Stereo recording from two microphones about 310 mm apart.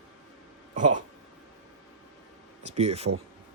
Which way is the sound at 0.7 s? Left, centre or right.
Right.